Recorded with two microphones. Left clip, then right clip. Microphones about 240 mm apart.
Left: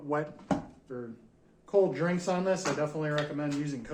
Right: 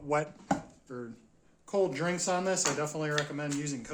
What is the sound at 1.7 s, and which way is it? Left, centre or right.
Speech, right.